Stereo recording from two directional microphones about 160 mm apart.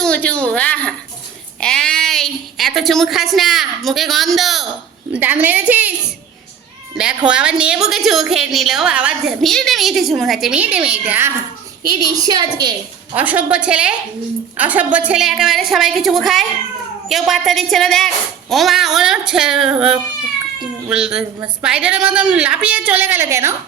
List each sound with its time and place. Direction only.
0.0 s a woman's voice: 5° left (ahead or behind); by 5.9 s 10° right (ahead or behind)
6.9 s a woman's voice: 5° right (ahead or behind)
12.1 s a woman's voice: 25° right (ahead or behind)
13.1 s a woman's voice: 10° right (ahead or behind)
20.9 s a woman's voice: 5° right (ahead or behind)